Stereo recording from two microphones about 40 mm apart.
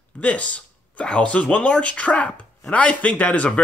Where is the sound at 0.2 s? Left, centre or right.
Left.